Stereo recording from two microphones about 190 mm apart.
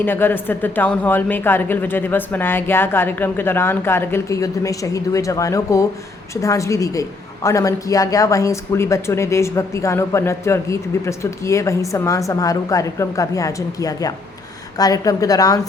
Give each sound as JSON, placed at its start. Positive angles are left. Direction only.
{"t": 0.0, "sound": "a woman's voice", "side_deg": 10}